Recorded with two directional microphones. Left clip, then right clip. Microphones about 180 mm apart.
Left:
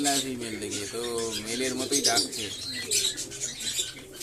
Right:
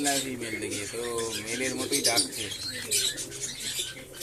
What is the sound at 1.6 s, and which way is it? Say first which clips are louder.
Speech: left 1 dB; 10° left (ahead or behind).